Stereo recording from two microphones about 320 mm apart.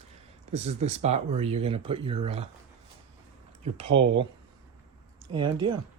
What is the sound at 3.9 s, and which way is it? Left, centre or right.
Speech, right.